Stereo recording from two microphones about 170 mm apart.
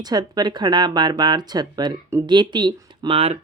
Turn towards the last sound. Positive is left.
turn(degrees=-35)  # may be behind; listen again after turning